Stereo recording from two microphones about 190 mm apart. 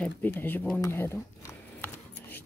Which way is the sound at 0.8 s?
10° left (ahead or behind).